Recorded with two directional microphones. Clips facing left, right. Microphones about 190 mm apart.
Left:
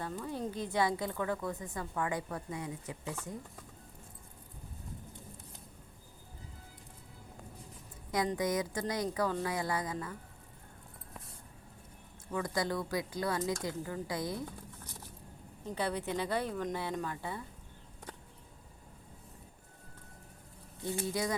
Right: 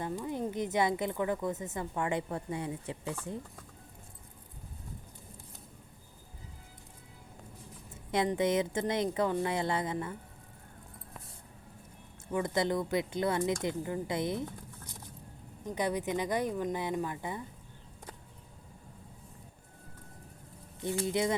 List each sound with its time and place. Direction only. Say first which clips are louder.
0.0 s a woman's voice: right 3 dB; 15° right (ahead or behind)
8.4 s a woman's voice: right 4 dB; 25° right (ahead or behind)
12.3 s a woman's voice: right 4 dB; 20° right (ahead or behind)
15.6 s speech: right 3 dB; 15° right (ahead or behind)
21.1 s a woman's voice: right 5 dB; 25° right (ahead or behind)